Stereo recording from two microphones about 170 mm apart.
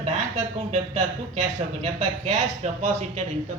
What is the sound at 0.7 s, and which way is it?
Speech, 40° right (ahead or behind).